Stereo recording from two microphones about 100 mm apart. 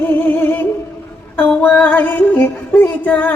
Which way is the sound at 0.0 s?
15° left (ahead or behind).